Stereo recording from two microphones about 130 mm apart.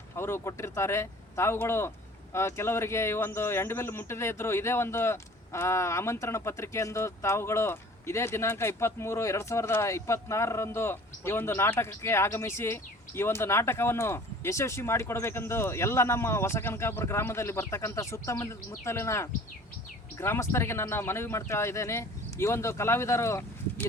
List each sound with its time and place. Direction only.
0.2 s speech: 20° left (ahead or behind)